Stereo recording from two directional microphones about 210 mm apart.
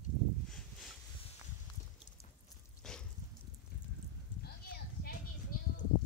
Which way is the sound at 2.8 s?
5° left (ahead or behind).